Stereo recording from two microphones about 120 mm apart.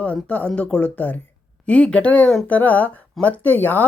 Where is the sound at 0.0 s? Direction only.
10° left (ahead or behind).